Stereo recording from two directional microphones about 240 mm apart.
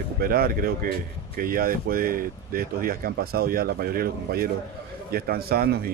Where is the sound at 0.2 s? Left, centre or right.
Right.